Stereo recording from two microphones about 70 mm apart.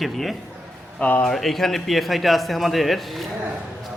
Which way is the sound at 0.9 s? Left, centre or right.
Centre.